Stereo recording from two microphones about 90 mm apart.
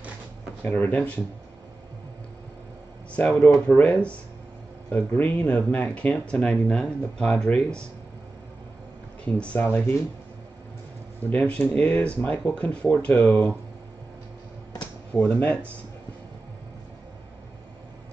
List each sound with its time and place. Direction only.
0.6 s speech: 15° left (ahead or behind)
3.6 s speech: 15° left (ahead or behind)
9.2 s speech: 15° left (ahead or behind)
9.7 s speech: 25° left (ahead or behind)
11.3 s speech: 15° left (ahead or behind)
13.2 s speech: 25° left (ahead or behind)
14.8 s a sound: 15° left (ahead or behind)